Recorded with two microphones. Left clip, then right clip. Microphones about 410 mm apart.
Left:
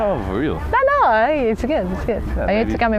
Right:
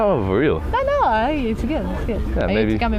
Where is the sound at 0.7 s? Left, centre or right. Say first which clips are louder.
Left 7 dB; left.